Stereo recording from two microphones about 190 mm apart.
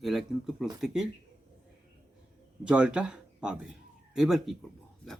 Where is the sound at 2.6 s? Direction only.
5° right (ahead or behind).